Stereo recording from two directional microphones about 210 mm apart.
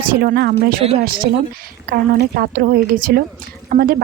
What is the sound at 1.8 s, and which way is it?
A woman's voice, 45° right (ahead or behind).